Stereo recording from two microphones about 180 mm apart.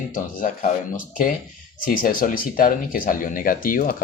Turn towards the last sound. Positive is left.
turn(degrees=50)  # may be behind; listen again after turning